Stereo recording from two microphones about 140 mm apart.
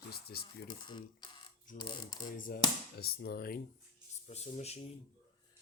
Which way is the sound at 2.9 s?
90° left.